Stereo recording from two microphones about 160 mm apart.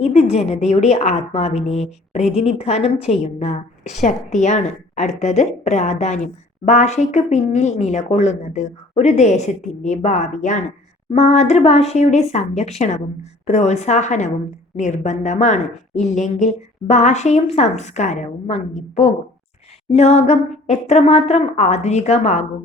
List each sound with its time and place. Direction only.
0.0 s a woman's voice: 40° left (ahead or behind)